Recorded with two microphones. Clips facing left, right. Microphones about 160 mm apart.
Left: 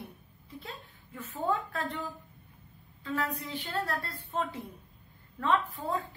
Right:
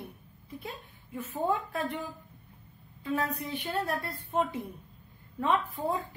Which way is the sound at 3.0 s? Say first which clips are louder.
Right 2 dB; 15° right (ahead or behind).